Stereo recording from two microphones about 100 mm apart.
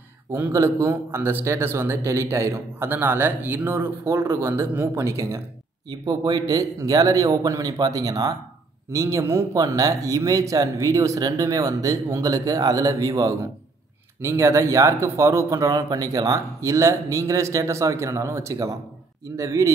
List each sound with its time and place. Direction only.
0.3 s a man's voice: 25° right (ahead or behind)
5.9 s speech: 45° right (ahead or behind)